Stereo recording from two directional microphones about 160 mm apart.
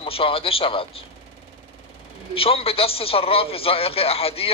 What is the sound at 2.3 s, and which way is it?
A man's voice, 35° left (ahead or behind).